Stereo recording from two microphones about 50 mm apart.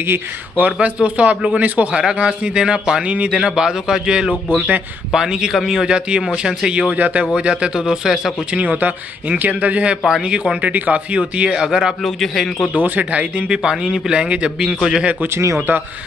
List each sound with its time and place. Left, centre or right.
0.6 s speech: right
2.0 s speech: centre
3.3 s a man's voice: centre
5.9 s speech: centre
7.0 s speech: right; by 8.4 s centre
8.5 s speech: right
10.0 s speech: centre
10.6 s speech: right; by 11.9 s centre
12.0 s a man's voice: centre
12.7 s speech: right
13.6 s speech: centre
14.1 s speech: centre
15.2 s speech: right